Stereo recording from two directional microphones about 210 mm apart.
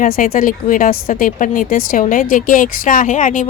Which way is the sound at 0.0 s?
40° left (ahead or behind).